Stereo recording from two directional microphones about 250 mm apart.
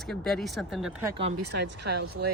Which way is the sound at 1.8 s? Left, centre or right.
Right.